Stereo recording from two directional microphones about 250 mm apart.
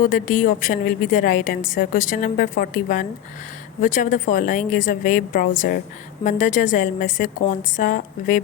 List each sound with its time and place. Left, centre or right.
0.0 s a woman's voice: left